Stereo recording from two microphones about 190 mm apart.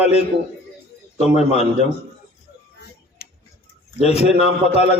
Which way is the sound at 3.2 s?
50° left (ahead or behind).